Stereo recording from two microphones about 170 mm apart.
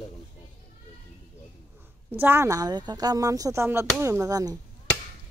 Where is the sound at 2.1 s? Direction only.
15° right (ahead or behind).